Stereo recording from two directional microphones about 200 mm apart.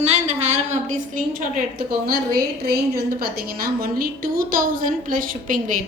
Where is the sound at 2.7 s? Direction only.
50° right (ahead or behind).